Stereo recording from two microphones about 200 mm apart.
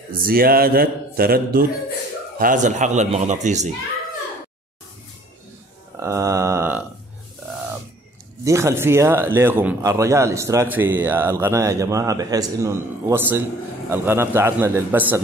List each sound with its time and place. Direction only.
0.1 s a man's voice: 45° right (ahead or behind)
5.9 s a sound: 15° right (ahead or behind)
8.5 s speech: 15° right (ahead or behind)